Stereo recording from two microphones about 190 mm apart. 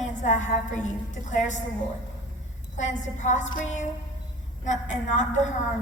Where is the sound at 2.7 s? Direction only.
40° left (ahead or behind).